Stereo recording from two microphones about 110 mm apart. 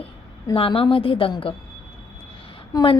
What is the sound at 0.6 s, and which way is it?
Speech, 60° left (ahead or behind).